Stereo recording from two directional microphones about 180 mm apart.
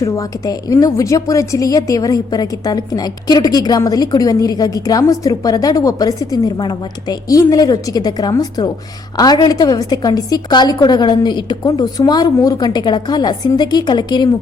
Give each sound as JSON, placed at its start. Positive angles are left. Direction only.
{"t": 0.0, "sound": "a woman's voice", "side_deg": 20}